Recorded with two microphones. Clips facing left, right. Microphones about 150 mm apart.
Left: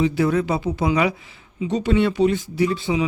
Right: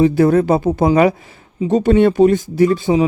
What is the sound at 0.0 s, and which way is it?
Speech, 45° right (ahead or behind).